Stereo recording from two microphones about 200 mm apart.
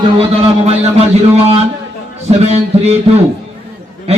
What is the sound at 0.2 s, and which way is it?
A man's voice, 30° right (ahead or behind).